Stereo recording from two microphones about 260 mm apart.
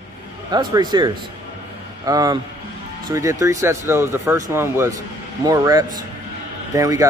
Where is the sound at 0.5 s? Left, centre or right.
Centre.